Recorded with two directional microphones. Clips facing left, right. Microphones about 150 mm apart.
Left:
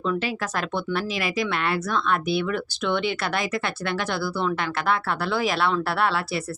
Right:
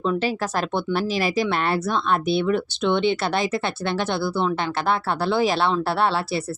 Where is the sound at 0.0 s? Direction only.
30° right (ahead or behind).